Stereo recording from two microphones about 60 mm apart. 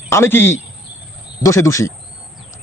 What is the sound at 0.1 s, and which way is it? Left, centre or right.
Speech, left.